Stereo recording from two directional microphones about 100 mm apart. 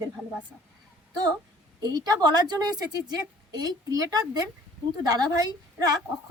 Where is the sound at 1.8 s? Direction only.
40° right (ahead or behind).